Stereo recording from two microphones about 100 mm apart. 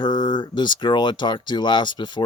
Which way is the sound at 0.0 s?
50° left (ahead or behind).